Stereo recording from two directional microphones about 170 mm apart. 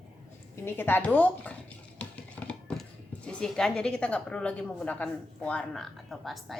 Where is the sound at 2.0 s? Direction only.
5° left (ahead or behind).